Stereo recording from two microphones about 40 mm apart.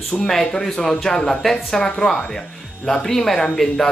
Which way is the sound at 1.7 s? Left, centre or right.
Centre.